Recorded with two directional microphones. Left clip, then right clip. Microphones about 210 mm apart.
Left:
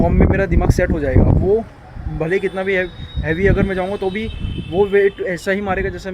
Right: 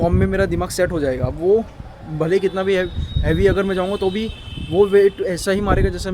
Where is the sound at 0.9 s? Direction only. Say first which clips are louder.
Left 3 dB; 15° right (ahead or behind).